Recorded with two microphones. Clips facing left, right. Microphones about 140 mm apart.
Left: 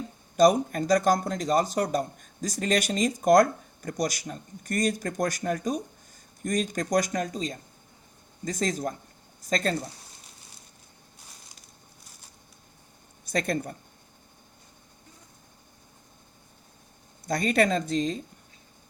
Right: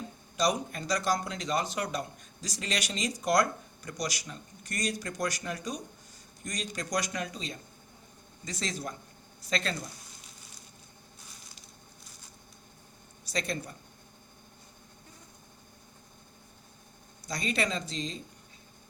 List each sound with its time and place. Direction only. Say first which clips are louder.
0.3 s speech: left 9 dB; 50° left (ahead or behind)
13.2 s speech: left 6 dB; 50° left (ahead or behind)
17.2 s speech: left 8 dB; 55° left (ahead or behind)